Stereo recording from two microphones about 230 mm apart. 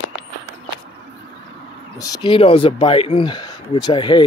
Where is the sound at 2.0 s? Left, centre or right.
Centre.